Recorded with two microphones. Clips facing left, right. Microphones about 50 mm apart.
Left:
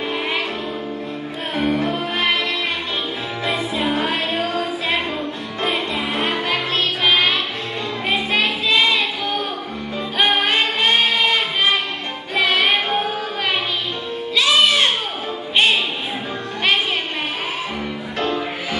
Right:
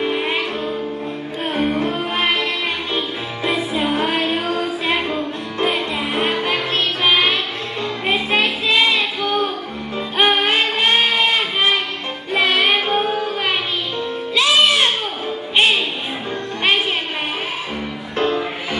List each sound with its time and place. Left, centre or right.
0.0 s music: centre
1.5 s music: centre
3.4 s music: centre
12.4 s child singing: centre
14.3 s music: centre
18.1 s music: centre